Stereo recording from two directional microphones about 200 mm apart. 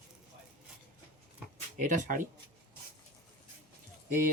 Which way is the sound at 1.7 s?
40° right (ahead or behind).